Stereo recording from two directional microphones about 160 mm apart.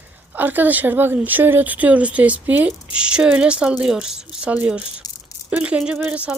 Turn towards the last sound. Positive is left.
turn(degrees=-10)  # may be behind; listen again after turning